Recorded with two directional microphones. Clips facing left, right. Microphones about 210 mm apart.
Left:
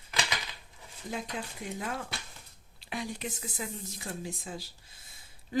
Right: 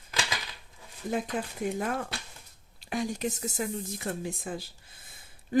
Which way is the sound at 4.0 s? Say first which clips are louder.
Right 5 dB; 55° right (ahead or behind).